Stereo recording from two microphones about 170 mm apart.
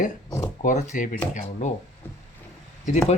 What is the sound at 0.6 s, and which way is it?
Speech, 45° left (ahead or behind).